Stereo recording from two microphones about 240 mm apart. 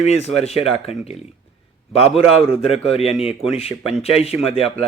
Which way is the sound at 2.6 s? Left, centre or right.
Left.